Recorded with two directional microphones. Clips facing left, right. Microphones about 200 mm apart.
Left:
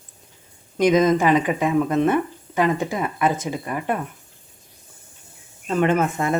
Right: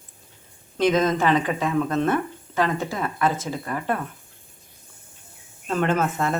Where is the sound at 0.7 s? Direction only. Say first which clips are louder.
Left 4 dB; 15° left (ahead or behind).